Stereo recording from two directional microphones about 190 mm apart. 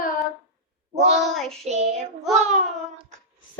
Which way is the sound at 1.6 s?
35° right (ahead or behind).